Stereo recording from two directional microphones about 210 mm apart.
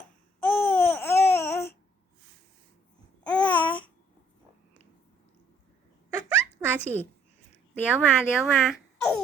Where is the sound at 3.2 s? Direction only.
5° left (ahead or behind).